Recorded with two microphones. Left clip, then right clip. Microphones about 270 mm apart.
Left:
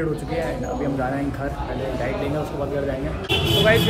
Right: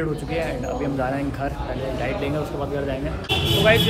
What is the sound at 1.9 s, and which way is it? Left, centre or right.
A man's voice, centre.